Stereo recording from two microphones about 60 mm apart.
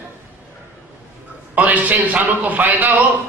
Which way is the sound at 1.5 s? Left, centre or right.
Right.